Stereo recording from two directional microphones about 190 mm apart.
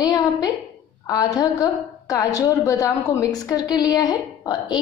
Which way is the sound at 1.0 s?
20° left (ahead or behind).